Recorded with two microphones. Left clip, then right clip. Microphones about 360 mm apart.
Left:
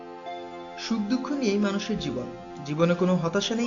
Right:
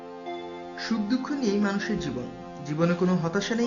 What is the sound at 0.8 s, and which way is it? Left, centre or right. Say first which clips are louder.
Speech: even; centre.